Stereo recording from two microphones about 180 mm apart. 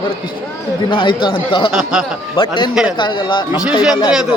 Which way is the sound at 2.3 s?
30° left (ahead or behind).